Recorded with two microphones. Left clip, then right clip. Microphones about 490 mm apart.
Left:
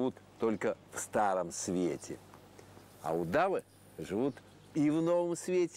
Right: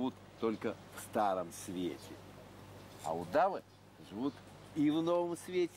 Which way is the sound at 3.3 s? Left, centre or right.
Left.